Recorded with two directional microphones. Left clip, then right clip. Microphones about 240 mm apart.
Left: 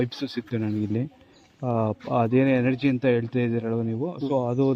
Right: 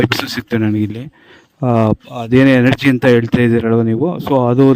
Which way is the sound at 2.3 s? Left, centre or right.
Right.